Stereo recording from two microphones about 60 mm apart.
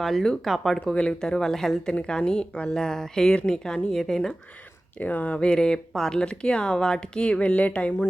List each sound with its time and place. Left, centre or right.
0.0 s speech: centre
0.9 s speech: centre
4.9 s speech: left